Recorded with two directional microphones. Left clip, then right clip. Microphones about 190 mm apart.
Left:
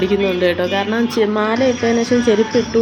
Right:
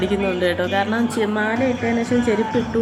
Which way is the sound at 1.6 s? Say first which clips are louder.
Left 5 dB; 30° right (ahead or behind).